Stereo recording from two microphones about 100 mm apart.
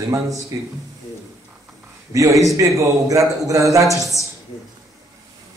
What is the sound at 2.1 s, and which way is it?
A man's voice, 35° right (ahead or behind).